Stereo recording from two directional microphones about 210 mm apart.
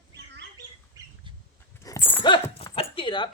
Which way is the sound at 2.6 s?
25° left (ahead or behind).